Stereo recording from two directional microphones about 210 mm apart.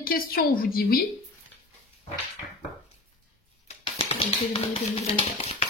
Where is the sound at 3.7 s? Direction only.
30° left (ahead or behind).